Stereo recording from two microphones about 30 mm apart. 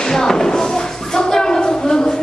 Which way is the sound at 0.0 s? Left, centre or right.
Centre.